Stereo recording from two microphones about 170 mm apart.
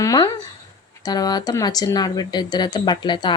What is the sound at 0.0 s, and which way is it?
Speech, 25° left (ahead or behind).